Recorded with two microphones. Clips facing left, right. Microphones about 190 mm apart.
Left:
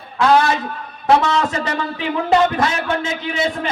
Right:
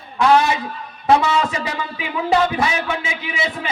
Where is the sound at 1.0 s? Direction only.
5° right (ahead or behind).